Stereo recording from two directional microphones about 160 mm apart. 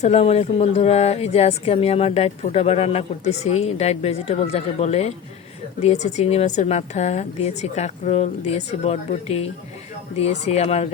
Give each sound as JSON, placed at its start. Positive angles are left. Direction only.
{"t": 0.0, "sound": "a woman's voice", "side_deg": 45}